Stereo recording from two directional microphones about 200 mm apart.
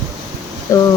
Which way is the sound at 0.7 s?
15° left (ahead or behind).